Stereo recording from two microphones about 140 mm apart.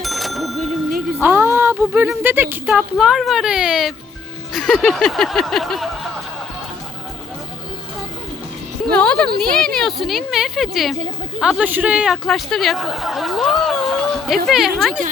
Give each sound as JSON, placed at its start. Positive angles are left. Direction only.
{"t": 0.0, "sound": "a sound", "side_deg": 0}
{"t": 1.2, "sound": "music", "side_deg": -15}
{"t": 1.7, "sound": "speech", "side_deg": -10}
{"t": 8.9, "sound": "a woman's voice", "side_deg": 5}